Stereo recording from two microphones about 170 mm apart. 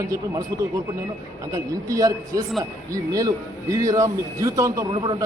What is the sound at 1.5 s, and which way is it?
Speech, 20° right (ahead or behind).